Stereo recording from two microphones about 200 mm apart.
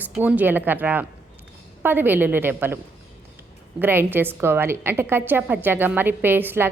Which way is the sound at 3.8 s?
10° right (ahead or behind).